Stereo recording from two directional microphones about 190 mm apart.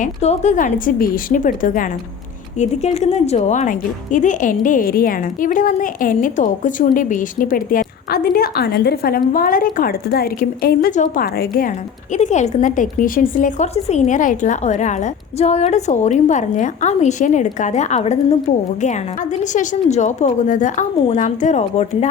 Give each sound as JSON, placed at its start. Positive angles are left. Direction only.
{"t": 0.0, "sound": "speech", "side_deg": 35}
{"t": 12.1, "sound": "a woman's voice", "side_deg": 40}